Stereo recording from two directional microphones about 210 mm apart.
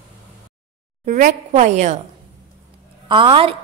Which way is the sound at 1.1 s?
35° right (ahead or behind).